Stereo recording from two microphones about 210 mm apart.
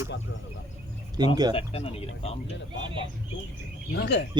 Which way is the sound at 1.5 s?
30° left (ahead or behind).